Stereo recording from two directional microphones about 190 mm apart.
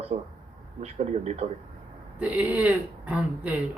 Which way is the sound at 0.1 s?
40° right (ahead or behind).